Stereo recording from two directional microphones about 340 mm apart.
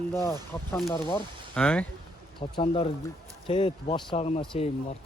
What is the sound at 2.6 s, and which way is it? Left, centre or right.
Speech, centre.